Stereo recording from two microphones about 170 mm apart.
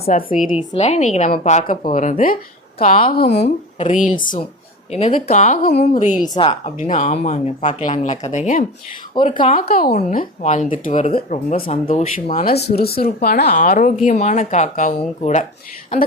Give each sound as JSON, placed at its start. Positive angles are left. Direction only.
{"t": 0.1, "sound": "a woman's voice", "side_deg": 50}
{"t": 3.4, "sound": "speech", "side_deg": 35}
{"t": 6.2, "sound": "speech", "side_deg": 25}
{"t": 6.5, "sound": "speech", "side_deg": 45}
{"t": 9.2, "sound": "speech", "side_deg": 35}
{"t": 9.6, "sound": "a woman's voice", "side_deg": 60}
{"t": 9.9, "sound": "speech", "side_deg": 45}
{"t": 11.5, "sound": "speech", "side_deg": 35}
{"t": 12.5, "sound": "speech", "side_deg": 70}